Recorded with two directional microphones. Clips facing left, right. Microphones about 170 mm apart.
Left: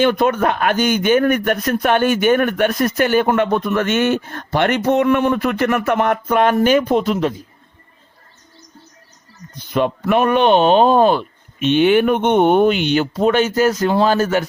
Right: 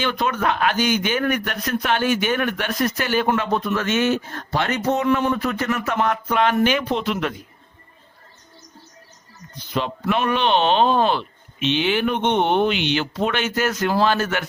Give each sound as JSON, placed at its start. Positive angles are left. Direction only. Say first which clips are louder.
{"t": 0.0, "sound": "speech", "louder": "left 7 dB", "side_deg": 50}
{"t": 9.6, "sound": "speech", "louder": "left 7 dB", "side_deg": 50}